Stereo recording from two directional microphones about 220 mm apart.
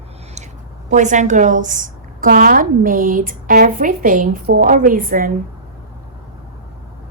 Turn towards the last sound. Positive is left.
turn(degrees=-40)  # may be behind; listen again after turning